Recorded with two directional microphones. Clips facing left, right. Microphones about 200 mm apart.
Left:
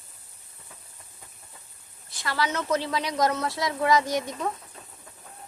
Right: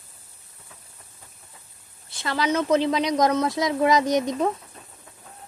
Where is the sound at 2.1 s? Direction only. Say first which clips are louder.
Right 4 dB; 25° right (ahead or behind).